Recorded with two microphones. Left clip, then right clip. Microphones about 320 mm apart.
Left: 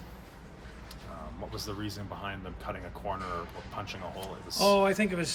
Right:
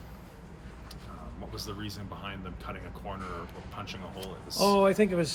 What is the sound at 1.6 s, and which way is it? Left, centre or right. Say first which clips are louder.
Speech: left 2 dB; centre.